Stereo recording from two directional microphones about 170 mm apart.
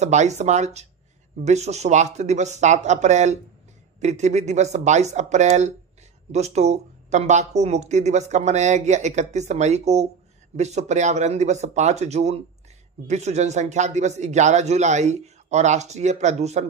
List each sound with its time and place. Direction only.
0.0 s speech: 40° right (ahead or behind)